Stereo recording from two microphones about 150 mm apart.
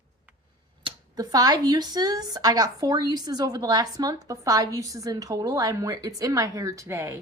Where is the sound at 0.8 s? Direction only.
25° right (ahead or behind).